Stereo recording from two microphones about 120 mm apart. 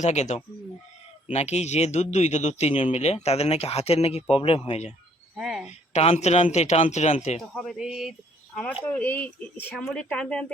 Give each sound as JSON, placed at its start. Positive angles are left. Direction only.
{"t": 0.0, "sound": "a man's voice", "side_deg": 75}
{"t": 5.4, "sound": "speech", "side_deg": -5}
{"t": 5.9, "sound": "a man's voice", "side_deg": 65}
{"t": 7.5, "sound": "speech", "side_deg": 0}
{"t": 8.8, "sound": "speech", "side_deg": 15}